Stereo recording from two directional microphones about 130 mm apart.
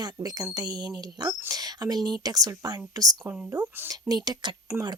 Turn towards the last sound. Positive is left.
turn(degrees=-30)  # may be behind; listen again after turning